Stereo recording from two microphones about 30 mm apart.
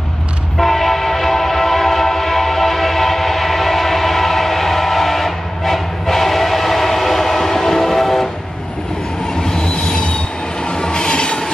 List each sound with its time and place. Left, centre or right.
0.6 s train: centre
9.4 s train: left